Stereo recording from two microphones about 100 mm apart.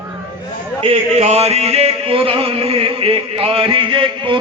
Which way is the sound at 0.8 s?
90° right.